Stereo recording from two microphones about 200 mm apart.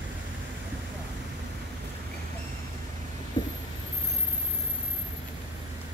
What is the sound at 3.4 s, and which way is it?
Vehicle, 20° left (ahead or behind).